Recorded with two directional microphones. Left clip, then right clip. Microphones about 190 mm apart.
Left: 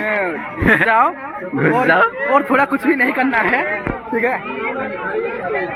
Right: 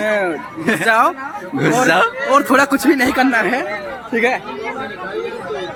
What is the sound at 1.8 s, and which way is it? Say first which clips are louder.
Speech: even; 25° right (ahead or behind).